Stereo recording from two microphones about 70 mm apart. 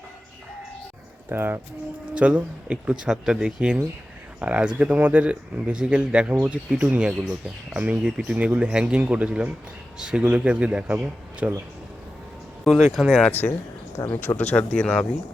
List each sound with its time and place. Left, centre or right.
1.3 s speech: right
2.1 s speech: centre
12.8 s speech: centre
14.1 s speech: left